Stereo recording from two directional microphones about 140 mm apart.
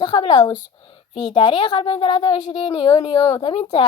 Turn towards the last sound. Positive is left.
turn(degrees=40)  # may be behind; listen again after turning